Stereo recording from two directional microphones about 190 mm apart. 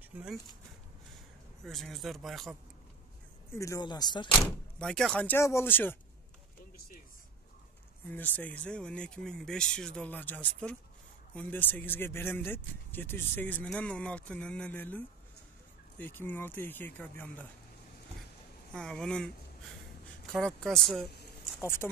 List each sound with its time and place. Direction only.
0.1 s speech: 10° right (ahead or behind)
3.5 s speech: 15° left (ahead or behind)
4.7 s speech: 5° left (ahead or behind)
8.1 s speech: 10° left (ahead or behind)
18.7 s speech: 5° left (ahead or behind)
20.3 s speech: centre (ahead or behind)
21.5 s speech: 10° left (ahead or behind)